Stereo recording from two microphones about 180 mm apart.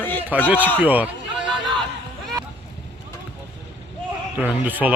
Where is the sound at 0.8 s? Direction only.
10° right (ahead or behind).